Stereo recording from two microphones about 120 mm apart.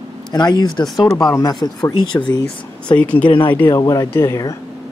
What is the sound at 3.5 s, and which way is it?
A woman's voice, 20° left (ahead or behind).